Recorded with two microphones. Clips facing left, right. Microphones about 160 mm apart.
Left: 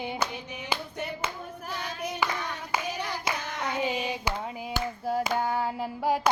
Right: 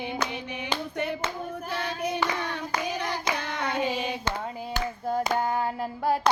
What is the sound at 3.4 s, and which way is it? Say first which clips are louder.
Hands: right 2 dB; 60° right (ahead or behind).